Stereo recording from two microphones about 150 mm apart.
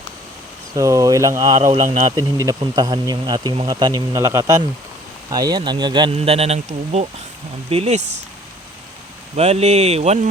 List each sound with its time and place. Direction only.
0.7 s speech: 20° right (ahead or behind); by 8.0 s 45° right (ahead or behind)
9.3 s speech: 45° right (ahead or behind)